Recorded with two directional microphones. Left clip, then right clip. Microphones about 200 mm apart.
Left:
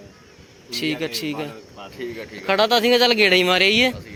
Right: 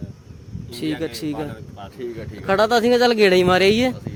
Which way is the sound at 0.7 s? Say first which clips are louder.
Left 2 dB; 25° right (ahead or behind).